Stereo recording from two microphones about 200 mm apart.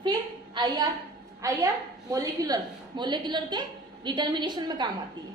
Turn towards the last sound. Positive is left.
turn(degrees=-20)  # may be behind; listen again after turning